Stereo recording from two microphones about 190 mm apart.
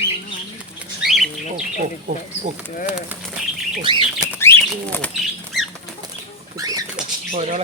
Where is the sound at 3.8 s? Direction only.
25° right (ahead or behind).